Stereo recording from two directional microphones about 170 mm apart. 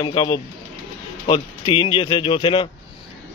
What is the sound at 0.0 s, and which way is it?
A man's voice, 25° left (ahead or behind).